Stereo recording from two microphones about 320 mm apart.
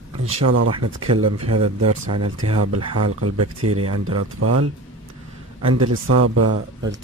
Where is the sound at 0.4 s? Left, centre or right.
Right.